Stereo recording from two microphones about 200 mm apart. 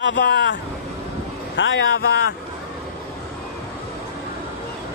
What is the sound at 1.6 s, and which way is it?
Speech, 70° left (ahead or behind).